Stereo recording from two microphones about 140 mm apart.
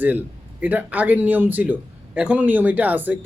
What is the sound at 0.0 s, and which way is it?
A man's voice, 15° right (ahead or behind).